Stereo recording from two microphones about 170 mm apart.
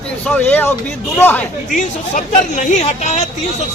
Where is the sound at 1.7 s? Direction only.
50° left (ahead or behind).